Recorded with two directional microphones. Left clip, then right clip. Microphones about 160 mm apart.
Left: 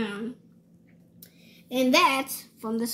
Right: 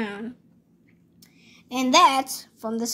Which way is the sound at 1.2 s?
55° right (ahead or behind).